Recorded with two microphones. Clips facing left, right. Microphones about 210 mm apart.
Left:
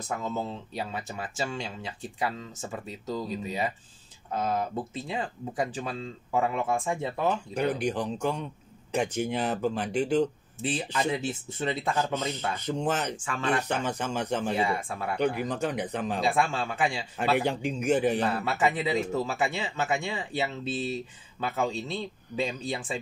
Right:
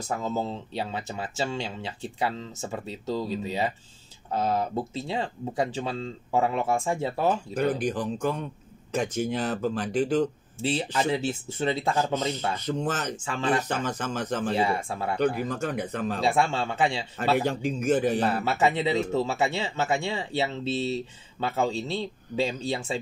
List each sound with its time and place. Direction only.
0.2 s speech: 30° right (ahead or behind)
7.8 s speech: 15° left (ahead or behind)
10.6 s speech: 30° right (ahead or behind)
12.6 s speech: 15° left (ahead or behind)
13.2 s speech: 30° right (ahead or behind)
13.6 s speech: 15° left (ahead or behind)
14.6 s speech: 25° right (ahead or behind)
15.4 s speech: 15° left (ahead or behind)
16.2 s speech: 30° right (ahead or behind)
17.4 s speech: 15° left (ahead or behind)
18.2 s speech: 30° right (ahead or behind)